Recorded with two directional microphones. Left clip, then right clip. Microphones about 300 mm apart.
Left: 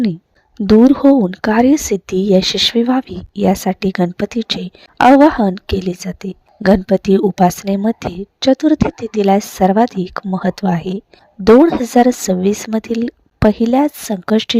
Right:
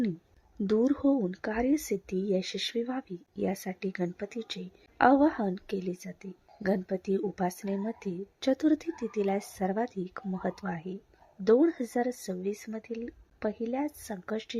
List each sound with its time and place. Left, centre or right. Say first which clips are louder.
0.7 s a woman's voice: left 17 dB; left